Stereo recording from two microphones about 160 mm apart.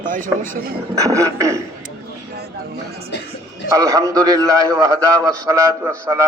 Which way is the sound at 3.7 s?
20° right (ahead or behind).